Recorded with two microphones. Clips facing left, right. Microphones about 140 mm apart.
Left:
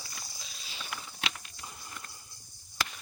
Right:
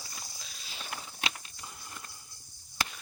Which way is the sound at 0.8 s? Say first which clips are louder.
Right 1 dB; 40° right (ahead or behind).